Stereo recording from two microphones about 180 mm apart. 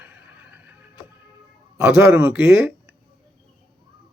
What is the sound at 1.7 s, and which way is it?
Speech, 15° right (ahead or behind).